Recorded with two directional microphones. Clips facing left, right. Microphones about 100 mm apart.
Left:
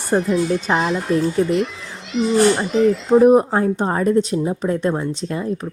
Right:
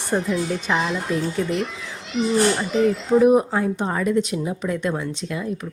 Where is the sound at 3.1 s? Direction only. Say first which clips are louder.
Left 4 dB; 35° left (ahead or behind).